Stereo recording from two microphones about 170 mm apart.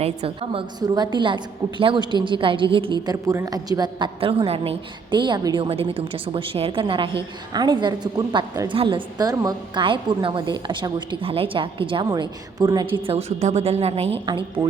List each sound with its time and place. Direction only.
0.0 s a woman's voice: 35° right (ahead or behind)